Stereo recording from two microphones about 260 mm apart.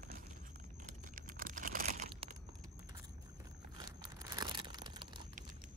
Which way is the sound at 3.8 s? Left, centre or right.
Centre.